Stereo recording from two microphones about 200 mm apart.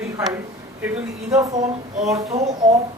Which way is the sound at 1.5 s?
35° right (ahead or behind).